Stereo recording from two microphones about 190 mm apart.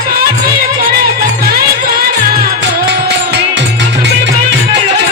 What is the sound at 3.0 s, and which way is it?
Music, 65° right (ahead or behind).